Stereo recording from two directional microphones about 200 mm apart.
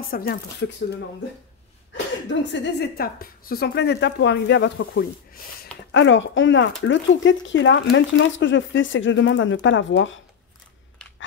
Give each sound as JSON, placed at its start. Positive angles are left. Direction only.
{"t": 0.1, "sound": "speech", "side_deg": 50}
{"t": 2.2, "sound": "a woman's voice", "side_deg": 60}